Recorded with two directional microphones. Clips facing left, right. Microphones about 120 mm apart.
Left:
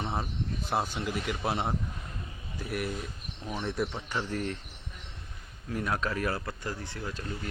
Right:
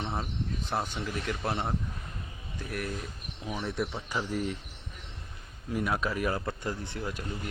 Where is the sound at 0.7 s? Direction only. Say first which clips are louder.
Left 3 dB; 5° left (ahead or behind).